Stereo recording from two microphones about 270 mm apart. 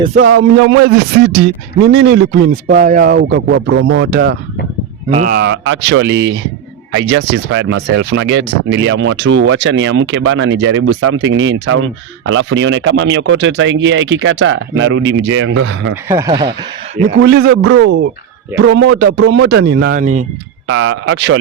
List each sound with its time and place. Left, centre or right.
0.3 s speech: right
1.9 s speech: right
16.0 s speech: centre
17.2 s speech: right
17.7 s speech: right
18.5 s speech: right
20.7 s speech: right